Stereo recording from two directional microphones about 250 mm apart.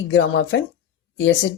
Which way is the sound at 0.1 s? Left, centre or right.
Left.